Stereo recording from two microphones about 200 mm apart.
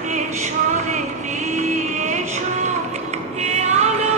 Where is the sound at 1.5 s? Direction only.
40° right (ahead or behind).